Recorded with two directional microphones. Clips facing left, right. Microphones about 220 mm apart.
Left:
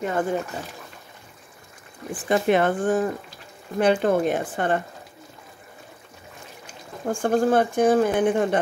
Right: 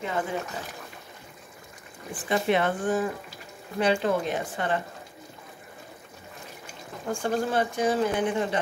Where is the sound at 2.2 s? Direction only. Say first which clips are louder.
Left 4 dB; 50° left (ahead or behind).